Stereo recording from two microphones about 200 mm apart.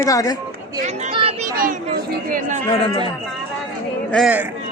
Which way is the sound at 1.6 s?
40° right (ahead or behind).